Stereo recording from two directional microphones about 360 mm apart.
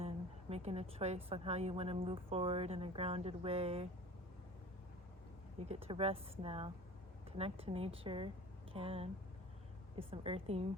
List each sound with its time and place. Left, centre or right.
0.0 s a woman's voice: centre
5.6 s a woman's voice: centre